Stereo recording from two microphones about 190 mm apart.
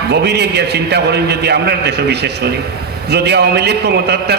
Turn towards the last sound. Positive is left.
turn(degrees=-60)  # may be behind; listen again after turning